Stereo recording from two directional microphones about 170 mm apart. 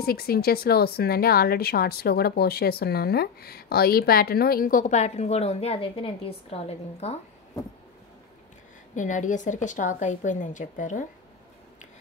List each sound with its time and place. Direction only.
0.0 s a woman's voice: 60° left (ahead or behind); by 7.2 s 40° left (ahead or behind)
8.9 s a woman's voice: 50° left (ahead or behind)